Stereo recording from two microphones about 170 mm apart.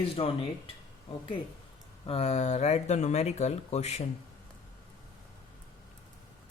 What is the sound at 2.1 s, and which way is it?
Speech, 40° left (ahead or behind).